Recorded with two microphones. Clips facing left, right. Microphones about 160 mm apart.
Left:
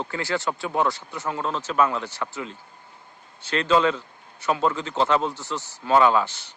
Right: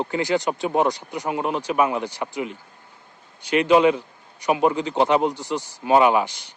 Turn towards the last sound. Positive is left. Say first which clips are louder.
# right 2 dB
turn(degrees=-15)  # may be behind; listen again after turning